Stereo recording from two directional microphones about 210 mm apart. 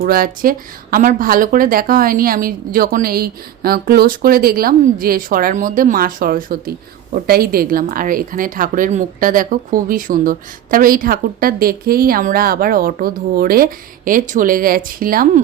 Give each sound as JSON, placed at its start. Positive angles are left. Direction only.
{"t": 0.0, "sound": "speech", "side_deg": -45}